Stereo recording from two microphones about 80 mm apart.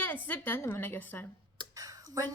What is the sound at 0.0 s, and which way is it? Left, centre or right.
A woman's voice, left.